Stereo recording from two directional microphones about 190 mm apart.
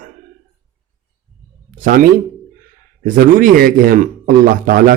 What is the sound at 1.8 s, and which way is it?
A man's voice, 50° right (ahead or behind).